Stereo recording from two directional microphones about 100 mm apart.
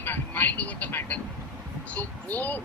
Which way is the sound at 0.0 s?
20° left (ahead or behind).